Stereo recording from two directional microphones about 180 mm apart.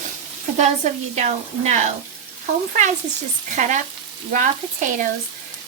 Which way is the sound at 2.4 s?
45° right (ahead or behind).